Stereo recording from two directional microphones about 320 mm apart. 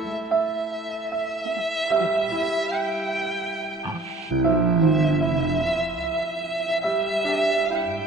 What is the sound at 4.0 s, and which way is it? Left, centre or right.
Music, centre.